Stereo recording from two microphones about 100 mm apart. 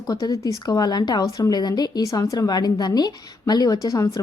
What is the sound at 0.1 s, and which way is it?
A woman's voice, 40° left (ahead or behind).